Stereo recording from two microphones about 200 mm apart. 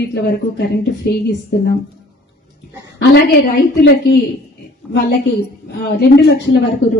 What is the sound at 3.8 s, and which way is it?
Speech, 65° left (ahead or behind).